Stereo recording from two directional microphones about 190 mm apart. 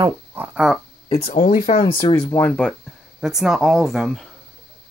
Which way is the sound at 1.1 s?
30° left (ahead or behind).